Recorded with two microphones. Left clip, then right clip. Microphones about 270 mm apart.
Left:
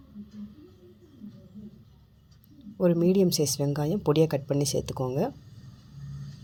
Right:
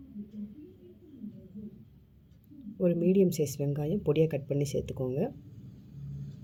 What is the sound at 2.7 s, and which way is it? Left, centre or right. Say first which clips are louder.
Speech: left 3 dB; left.